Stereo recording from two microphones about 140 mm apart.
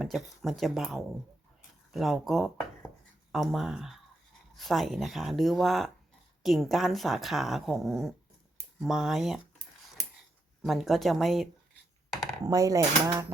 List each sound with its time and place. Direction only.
0.0 s speech: centre (ahead or behind)
10.0 s a sound: centre (ahead or behind)
12.5 s speech: 25° right (ahead or behind)